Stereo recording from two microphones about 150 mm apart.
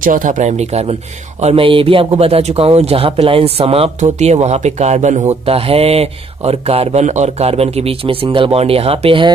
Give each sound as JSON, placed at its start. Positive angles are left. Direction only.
{"t": 0.0, "sound": "speech", "side_deg": -65}
{"t": 1.4, "sound": "a man's voice", "side_deg": -40}